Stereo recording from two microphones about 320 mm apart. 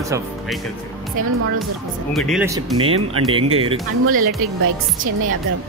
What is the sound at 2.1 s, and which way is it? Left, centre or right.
Speech, centre.